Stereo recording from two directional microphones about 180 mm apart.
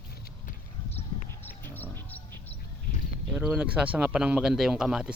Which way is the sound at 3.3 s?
5° right (ahead or behind).